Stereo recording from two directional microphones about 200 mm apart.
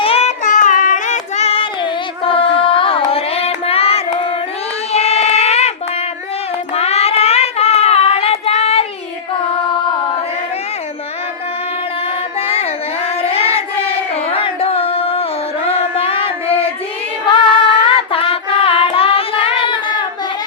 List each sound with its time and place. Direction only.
0.0 s child singing: 30° left (ahead or behind)
6.7 s child singing: 30° left (ahead or behind)
12.4 s child singing: 30° left (ahead or behind)
14.3 s carnatic music: 30° left (ahead or behind)
15.7 s music: 30° left (ahead or behind)